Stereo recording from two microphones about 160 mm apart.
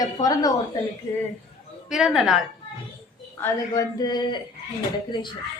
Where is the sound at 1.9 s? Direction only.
Centre (ahead or behind).